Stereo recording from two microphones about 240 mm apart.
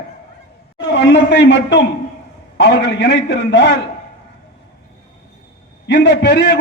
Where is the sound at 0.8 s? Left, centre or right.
Left.